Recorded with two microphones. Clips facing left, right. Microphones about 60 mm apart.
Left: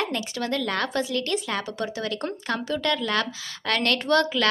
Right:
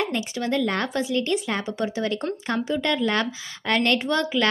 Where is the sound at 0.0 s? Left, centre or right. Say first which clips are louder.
Right 2 dB; right.